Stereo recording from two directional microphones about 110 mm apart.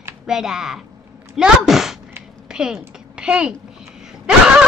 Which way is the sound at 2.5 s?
5° right (ahead or behind).